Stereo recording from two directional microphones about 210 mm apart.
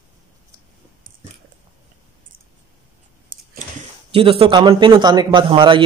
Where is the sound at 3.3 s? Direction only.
40° right (ahead or behind).